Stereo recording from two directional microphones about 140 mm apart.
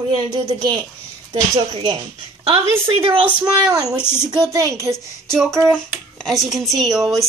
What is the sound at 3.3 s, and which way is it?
Speech, 10° right (ahead or behind).